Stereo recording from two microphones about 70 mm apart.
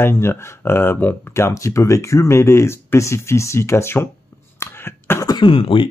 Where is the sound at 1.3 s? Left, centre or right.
Left.